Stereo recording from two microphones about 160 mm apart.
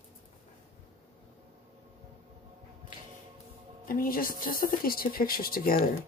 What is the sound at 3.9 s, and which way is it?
Speech, 60° left (ahead or behind).